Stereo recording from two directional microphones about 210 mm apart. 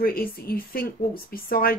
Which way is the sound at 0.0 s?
45° left (ahead or behind).